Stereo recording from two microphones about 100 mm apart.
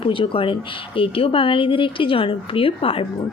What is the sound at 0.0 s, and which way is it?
A woman's voice, 60° left (ahead or behind).